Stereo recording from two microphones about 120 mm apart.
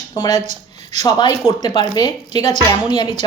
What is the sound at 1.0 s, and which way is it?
Speech, 30° left (ahead or behind).